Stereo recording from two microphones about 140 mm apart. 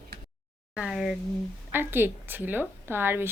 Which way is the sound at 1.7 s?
15° right (ahead or behind).